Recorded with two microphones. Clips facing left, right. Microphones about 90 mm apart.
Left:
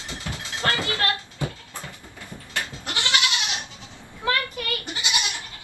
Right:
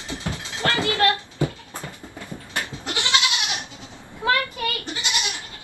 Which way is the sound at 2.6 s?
20° right (ahead or behind).